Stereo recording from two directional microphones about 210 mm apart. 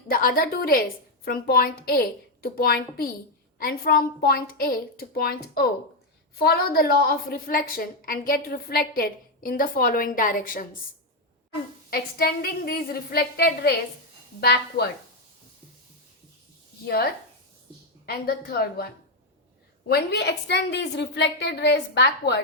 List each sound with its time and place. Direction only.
0.1 s a woman's voice: 45° left (ahead or behind)
11.9 s a woman's voice: 45° left (ahead or behind)
16.8 s a woman's voice: 50° left (ahead or behind)
19.9 s a woman's voice: 50° left (ahead or behind)